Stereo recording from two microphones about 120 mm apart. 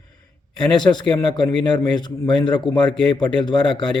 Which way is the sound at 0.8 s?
40° left (ahead or behind).